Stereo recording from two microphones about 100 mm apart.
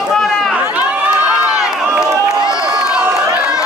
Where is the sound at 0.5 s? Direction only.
15° right (ahead or behind).